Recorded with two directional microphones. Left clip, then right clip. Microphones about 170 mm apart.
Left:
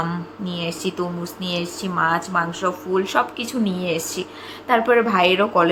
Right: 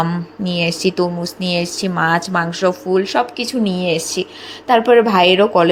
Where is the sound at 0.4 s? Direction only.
40° right (ahead or behind).